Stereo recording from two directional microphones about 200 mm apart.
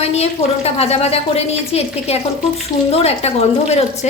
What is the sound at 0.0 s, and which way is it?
A woman's voice, 30° left (ahead or behind).